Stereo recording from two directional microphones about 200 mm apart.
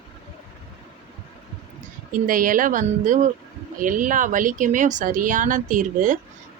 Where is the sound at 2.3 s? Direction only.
45° right (ahead or behind).